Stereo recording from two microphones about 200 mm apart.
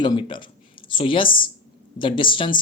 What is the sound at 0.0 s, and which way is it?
Speech, 20° left (ahead or behind).